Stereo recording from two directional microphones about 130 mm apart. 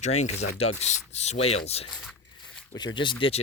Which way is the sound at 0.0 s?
60° left (ahead or behind).